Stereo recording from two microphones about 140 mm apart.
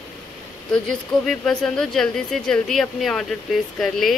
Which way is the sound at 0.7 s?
5° left (ahead or behind).